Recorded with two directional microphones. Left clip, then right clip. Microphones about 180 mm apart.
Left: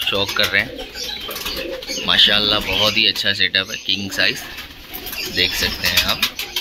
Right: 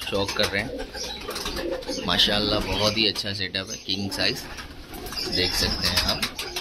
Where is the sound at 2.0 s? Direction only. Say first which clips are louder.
Left 8 dB; 15° right (ahead or behind).